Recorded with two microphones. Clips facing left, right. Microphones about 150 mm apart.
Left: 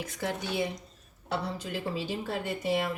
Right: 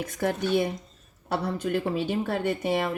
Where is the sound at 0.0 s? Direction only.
55° right (ahead or behind).